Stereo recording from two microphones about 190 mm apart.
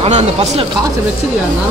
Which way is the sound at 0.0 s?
35° right (ahead or behind).